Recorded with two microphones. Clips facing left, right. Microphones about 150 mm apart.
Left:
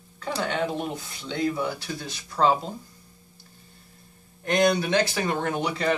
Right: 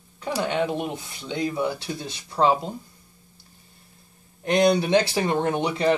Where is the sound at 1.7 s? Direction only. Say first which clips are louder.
Right 2 dB; 25° right (ahead or behind).